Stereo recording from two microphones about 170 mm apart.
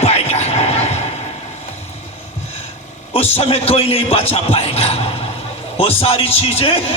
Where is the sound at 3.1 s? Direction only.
40° left (ahead or behind).